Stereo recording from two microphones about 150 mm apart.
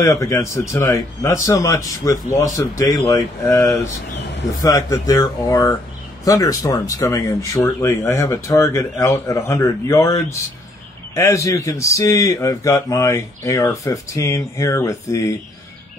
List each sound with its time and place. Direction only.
0.0 s speech: 20° left (ahead or behind)
4.6 s speech: 25° left (ahead or behind)